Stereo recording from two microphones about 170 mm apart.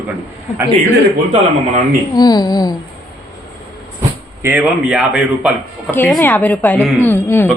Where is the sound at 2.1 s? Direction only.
25° left (ahead or behind).